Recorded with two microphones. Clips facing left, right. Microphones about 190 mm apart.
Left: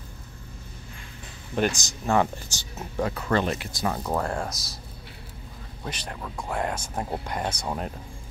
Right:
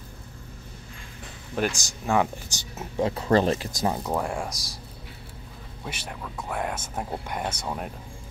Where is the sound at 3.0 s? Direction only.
30° right (ahead or behind).